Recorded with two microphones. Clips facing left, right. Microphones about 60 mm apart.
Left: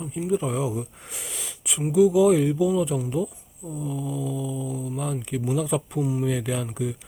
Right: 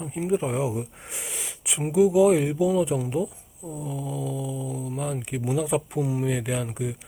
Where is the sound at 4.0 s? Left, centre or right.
Right.